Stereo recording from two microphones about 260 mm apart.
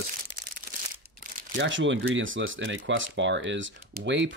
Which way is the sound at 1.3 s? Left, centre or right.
Right.